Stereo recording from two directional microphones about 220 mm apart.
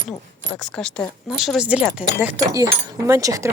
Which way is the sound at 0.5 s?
5° left (ahead or behind).